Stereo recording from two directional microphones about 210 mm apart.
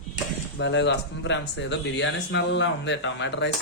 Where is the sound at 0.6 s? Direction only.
55° left (ahead or behind).